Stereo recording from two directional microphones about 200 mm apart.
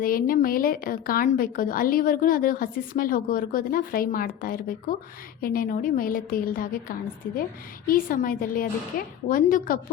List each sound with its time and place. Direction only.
0.0 s a woman's voice: 45° left (ahead or behind)